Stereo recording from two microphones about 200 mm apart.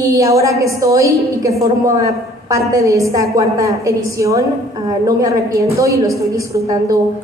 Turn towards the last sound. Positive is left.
turn(degrees=-15)  # may be behind; listen again after turning